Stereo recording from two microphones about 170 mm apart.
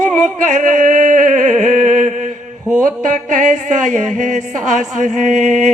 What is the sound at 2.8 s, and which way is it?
Music, 50° right (ahead or behind).